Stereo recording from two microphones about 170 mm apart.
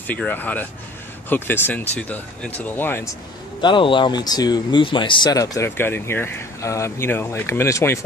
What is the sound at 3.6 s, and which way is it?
Speech, 30° left (ahead or behind).